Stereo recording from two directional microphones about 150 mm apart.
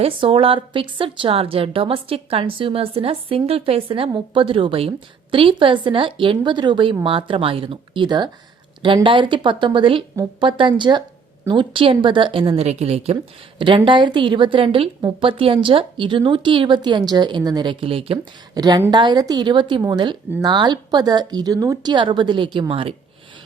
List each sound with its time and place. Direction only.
0.0 s a woman's voice: 40° right (ahead or behind)
18.5 s a woman's voice: 25° right (ahead or behind)